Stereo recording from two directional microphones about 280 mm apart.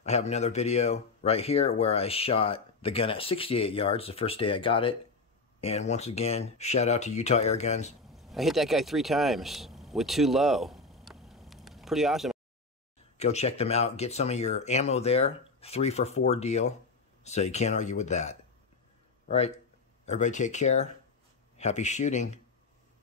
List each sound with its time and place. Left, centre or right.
0.0 s speech: left
8.1 s a sound: centre
13.2 s speech: left